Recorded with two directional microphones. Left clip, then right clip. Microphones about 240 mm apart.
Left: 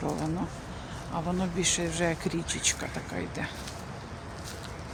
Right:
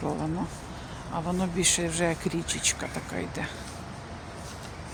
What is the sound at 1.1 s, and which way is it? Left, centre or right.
Speech, centre.